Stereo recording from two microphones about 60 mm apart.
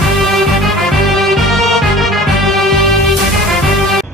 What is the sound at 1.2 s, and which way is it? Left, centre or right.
Music, centre.